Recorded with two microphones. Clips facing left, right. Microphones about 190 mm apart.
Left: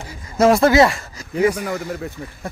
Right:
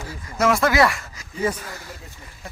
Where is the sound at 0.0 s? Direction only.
30° left (ahead or behind).